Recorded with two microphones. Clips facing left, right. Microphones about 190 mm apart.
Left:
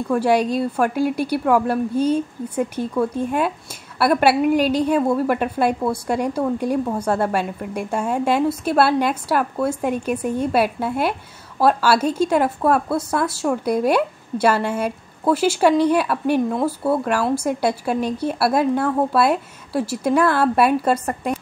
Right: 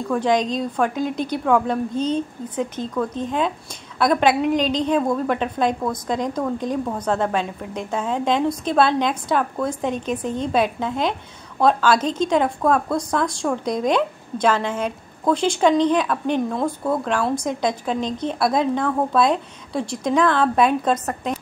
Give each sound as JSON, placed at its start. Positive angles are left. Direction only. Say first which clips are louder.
{"t": 0.1, "sound": "a woman's voice", "louder": "left 2 dB", "side_deg": 10}